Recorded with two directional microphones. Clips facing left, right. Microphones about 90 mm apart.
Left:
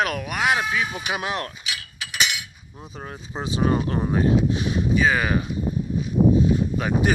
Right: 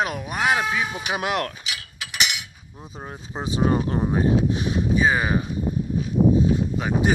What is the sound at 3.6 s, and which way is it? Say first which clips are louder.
Speech: right 1 dB; 30° right (ahead or behind).